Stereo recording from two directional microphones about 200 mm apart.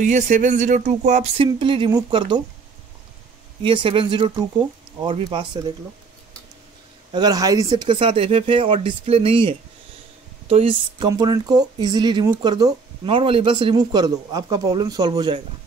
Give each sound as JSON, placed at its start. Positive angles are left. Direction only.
{"t": 0.0, "sound": "speech", "side_deg": -35}
{"t": 3.6, "sound": "speech", "side_deg": -25}
{"t": 7.1, "sound": "speech", "side_deg": -20}